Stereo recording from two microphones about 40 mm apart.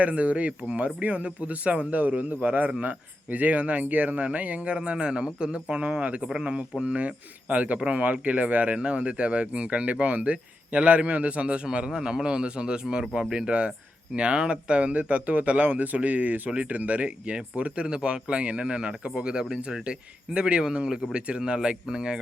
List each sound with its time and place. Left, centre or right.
0.0 s speech: right
6.0 s speech: right
11.9 s speech: centre
21.1 s speech: right